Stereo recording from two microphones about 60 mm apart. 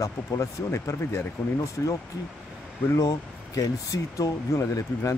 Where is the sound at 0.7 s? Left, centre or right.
Left.